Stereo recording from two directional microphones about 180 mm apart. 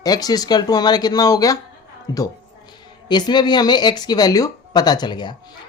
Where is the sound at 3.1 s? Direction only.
25° left (ahead or behind).